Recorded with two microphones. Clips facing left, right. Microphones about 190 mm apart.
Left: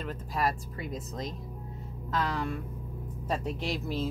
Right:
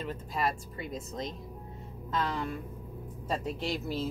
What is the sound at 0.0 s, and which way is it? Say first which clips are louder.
Speech: left 1 dB; centre (ahead or behind).